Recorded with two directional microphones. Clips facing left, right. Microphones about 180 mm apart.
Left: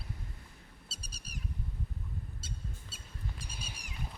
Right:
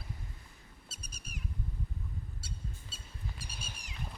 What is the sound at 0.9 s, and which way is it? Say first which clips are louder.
Bird: even; 30° left (ahead or behind).